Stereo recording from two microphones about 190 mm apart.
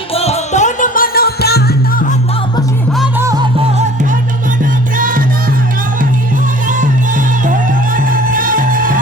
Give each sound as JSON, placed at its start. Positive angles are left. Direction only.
{"t": 0.1, "sound": "music", "side_deg": 35}
{"t": 3.2, "sound": "music", "side_deg": -15}
{"t": 4.9, "sound": "music", "side_deg": -45}
{"t": 6.7, "sound": "music", "side_deg": -45}